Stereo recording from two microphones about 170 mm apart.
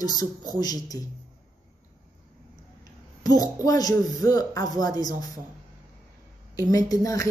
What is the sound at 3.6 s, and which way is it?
A woman's voice, 20° left (ahead or behind).